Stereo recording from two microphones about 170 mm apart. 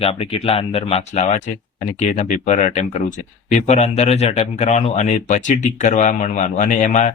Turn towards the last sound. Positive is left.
turn(degrees=45)  # may be behind; listen again after turning